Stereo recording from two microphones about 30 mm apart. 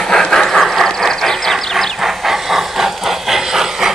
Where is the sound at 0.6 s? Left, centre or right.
Centre.